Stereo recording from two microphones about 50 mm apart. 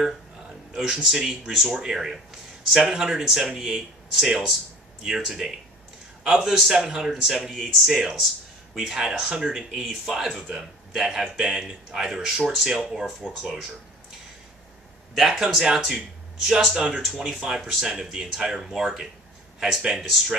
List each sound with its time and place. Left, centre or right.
0.7 s speech: centre
7.9 s speech: centre
15.1 s speech: centre
15.4 s speech: centre